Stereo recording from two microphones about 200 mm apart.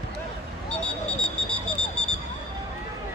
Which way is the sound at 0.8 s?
5° left (ahead or behind).